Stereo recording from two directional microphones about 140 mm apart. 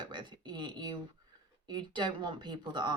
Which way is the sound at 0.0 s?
35° right (ahead or behind).